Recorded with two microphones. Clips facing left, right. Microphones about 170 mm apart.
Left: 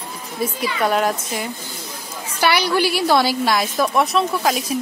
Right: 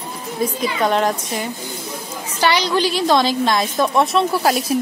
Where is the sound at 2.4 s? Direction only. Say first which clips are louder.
Even; 10° left (ahead or behind).